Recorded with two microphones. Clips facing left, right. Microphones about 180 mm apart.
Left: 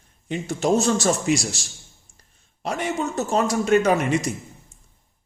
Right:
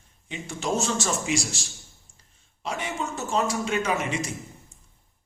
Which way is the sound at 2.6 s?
40° left (ahead or behind).